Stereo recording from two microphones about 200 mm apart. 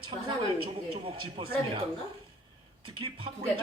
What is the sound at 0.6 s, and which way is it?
Speech, 25° right (ahead or behind).